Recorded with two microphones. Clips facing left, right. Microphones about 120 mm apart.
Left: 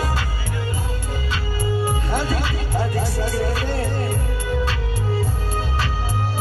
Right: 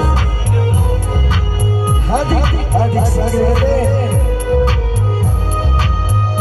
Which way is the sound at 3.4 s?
90° right.